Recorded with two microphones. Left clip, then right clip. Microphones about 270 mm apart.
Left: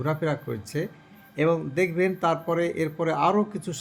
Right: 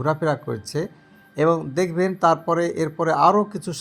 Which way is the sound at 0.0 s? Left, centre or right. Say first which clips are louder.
Right 5 dB; centre.